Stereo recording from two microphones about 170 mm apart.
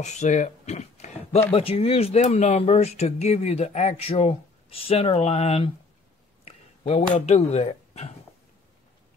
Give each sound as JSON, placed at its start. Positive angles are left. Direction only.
{"t": 0.0, "sound": "speech", "side_deg": 45}